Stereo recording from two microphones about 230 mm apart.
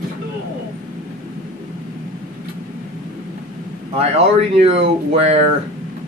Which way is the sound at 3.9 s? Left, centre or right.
Right.